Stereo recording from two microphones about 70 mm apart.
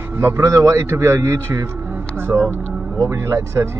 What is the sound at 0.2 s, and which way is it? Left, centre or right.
A man's voice, right.